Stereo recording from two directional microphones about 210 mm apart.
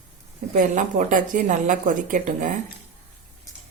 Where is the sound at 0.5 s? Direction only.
40° right (ahead or behind).